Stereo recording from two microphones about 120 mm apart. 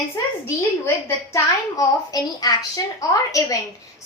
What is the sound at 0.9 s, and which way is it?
A woman's voice, 25° left (ahead or behind).